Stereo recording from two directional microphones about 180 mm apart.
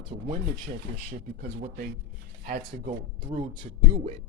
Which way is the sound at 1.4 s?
60° right (ahead or behind).